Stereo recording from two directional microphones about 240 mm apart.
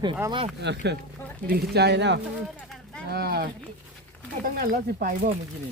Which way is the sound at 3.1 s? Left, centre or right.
Right.